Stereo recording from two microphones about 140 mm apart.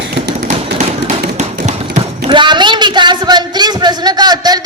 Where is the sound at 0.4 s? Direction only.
55° right (ahead or behind).